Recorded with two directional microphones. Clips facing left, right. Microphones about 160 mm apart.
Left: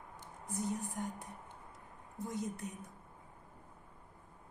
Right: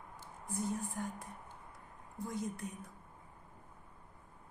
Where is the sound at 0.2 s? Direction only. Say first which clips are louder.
Even; 15° left (ahead or behind).